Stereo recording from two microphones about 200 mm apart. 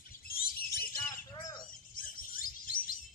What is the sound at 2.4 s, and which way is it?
Bird, 45° left (ahead or behind).